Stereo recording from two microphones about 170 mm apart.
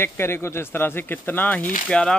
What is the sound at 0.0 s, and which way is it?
Speech, 15° left (ahead or behind).